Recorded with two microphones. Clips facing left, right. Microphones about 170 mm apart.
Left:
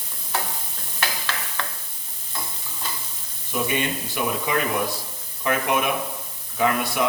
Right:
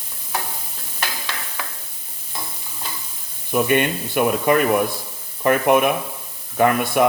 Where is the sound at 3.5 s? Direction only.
55° right (ahead or behind).